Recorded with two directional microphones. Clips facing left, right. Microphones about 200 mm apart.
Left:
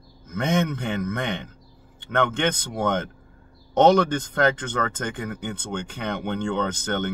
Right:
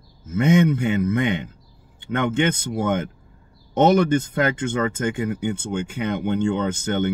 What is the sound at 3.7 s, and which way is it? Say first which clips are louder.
Speech: right 1 dB; 10° right (ahead or behind).